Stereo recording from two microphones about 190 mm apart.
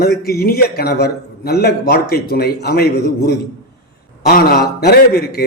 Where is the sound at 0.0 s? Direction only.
55° left (ahead or behind).